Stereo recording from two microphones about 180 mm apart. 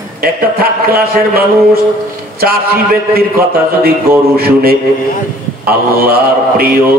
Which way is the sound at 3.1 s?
55° right (ahead or behind).